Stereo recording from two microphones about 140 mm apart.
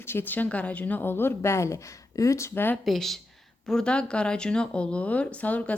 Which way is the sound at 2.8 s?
Centre (ahead or behind).